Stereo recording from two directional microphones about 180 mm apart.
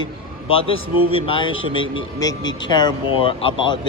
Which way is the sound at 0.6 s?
30° left (ahead or behind).